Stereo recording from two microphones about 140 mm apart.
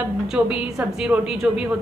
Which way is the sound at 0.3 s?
5° right (ahead or behind).